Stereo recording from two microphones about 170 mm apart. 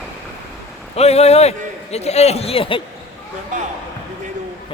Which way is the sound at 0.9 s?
40° left (ahead or behind).